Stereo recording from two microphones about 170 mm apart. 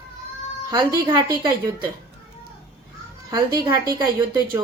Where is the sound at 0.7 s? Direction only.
25° right (ahead or behind).